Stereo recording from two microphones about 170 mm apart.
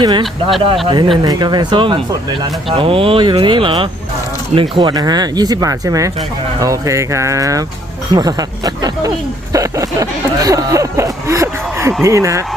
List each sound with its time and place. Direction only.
0.0 s speech: 30° right (ahead or behind)